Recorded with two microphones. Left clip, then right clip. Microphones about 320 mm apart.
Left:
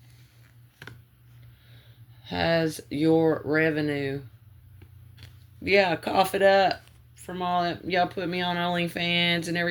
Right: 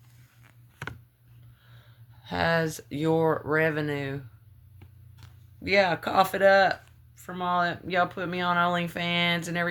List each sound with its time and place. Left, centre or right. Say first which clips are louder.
0.4 s a sound: right 6 dB; centre
2.2 s speech: left 1 dB; right
4.8 s biting: left 4 dB; centre
5.6 s speech: left 1 dB; right